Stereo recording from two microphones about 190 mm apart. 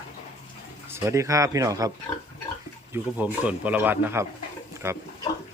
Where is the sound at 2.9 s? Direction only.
10° right (ahead or behind).